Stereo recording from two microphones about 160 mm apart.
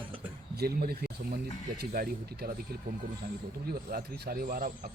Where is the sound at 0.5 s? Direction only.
75° right (ahead or behind).